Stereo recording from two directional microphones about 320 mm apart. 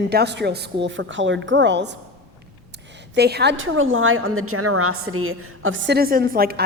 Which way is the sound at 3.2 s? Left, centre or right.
Right.